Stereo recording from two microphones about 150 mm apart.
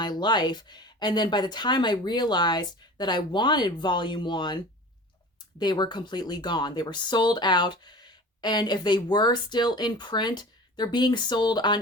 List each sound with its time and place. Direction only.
0.0 s speech: 30° left (ahead or behind)